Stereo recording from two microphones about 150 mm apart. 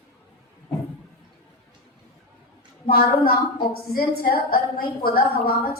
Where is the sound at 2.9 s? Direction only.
80° left.